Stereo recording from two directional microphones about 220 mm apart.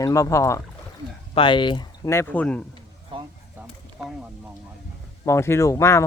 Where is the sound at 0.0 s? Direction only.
15° left (ahead or behind).